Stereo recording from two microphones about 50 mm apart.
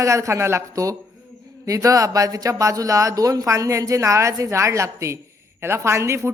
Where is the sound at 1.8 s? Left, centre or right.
Right.